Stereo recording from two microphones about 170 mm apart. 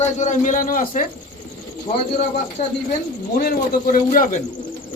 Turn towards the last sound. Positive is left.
turn(degrees=50)  # may be behind; listen again after turning